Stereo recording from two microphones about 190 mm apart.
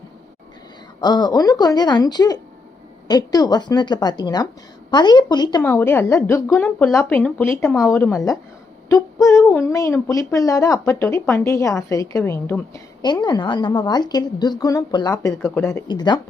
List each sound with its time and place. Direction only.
1.0 s a woman's voice: 20° left (ahead or behind)
5.6 s a woman's voice: 10° left (ahead or behind)
15.3 s speech: 5° left (ahead or behind)
15.7 s a woman's voice: 20° left (ahead or behind)